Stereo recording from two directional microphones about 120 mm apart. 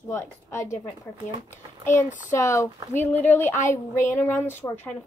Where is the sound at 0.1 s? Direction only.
20° left (ahead or behind).